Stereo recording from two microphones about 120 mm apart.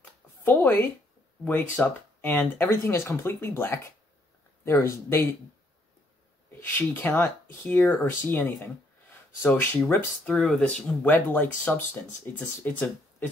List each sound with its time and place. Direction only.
0.5 s speech: 15° left (ahead or behind)
6.7 s speech: 15° left (ahead or behind)
9.6 s speech: 20° left (ahead or behind)